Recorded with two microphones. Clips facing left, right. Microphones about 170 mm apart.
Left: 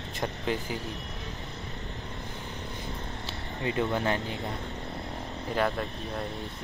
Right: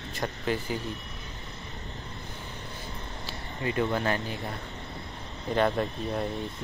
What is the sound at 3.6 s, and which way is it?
Speech, 20° left (ahead or behind).